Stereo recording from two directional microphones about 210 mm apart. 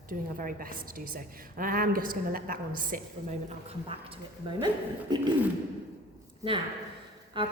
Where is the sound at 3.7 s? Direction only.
25° right (ahead or behind).